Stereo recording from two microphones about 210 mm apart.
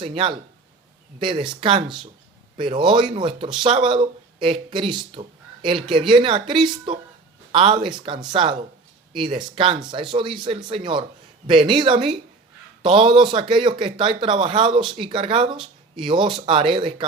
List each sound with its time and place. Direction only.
0.0 s speech: 25° right (ahead or behind)